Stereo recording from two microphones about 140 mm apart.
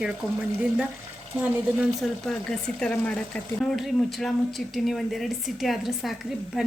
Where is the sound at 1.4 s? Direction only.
5° right (ahead or behind).